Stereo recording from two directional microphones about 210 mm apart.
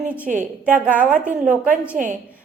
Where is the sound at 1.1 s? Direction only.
40° right (ahead or behind).